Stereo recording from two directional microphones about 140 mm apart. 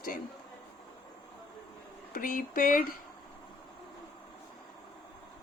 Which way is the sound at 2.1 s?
85° left.